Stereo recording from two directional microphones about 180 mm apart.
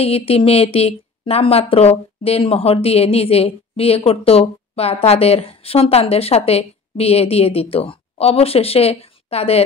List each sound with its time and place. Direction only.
0.0 s speech: 35° left (ahead or behind)